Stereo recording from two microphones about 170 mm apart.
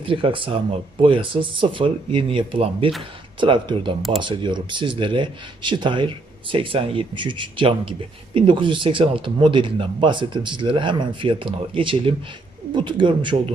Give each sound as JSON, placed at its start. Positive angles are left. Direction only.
{"t": 0.0, "sound": "speech", "side_deg": -30}